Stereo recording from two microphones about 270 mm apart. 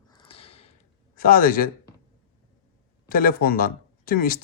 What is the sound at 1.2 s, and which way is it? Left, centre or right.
Speech, left.